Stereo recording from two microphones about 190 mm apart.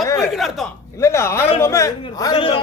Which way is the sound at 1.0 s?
15° left (ahead or behind).